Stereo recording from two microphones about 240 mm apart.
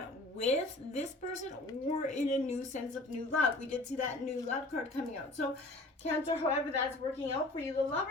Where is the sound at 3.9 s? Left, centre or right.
Left.